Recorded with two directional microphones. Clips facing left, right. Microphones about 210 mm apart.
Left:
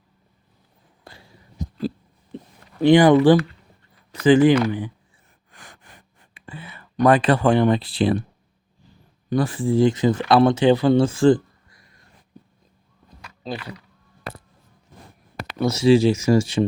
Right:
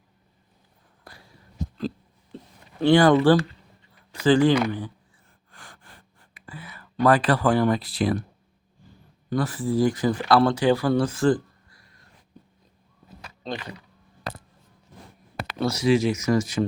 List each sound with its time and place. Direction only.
1.0 s a sound: 25° left (ahead or behind)
2.8 s speech: 15° left (ahead or behind)
5.5 s gasp: 20° left (ahead or behind)
9.3 s speech: 25° left (ahead or behind)
13.4 s speech: 5° left (ahead or behind)
15.6 s speech: 25° left (ahead or behind)